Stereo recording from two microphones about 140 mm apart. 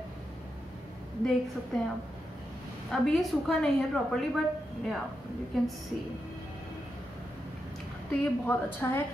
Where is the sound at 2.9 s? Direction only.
5° left (ahead or behind).